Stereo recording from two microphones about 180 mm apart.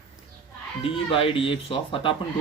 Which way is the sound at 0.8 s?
30° left (ahead or behind).